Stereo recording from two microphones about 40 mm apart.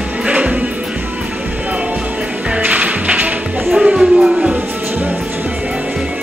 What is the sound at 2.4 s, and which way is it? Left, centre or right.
Music, right.